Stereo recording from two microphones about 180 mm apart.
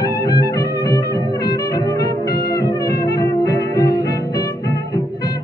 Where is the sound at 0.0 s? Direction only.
20° left (ahead or behind).